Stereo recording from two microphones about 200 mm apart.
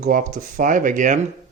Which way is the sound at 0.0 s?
40° right (ahead or behind).